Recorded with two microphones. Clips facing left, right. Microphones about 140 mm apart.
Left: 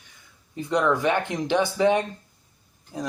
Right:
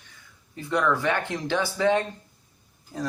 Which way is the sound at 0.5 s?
20° left (ahead or behind).